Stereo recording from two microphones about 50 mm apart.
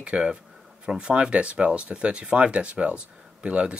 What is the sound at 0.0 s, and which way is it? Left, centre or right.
Speech, centre.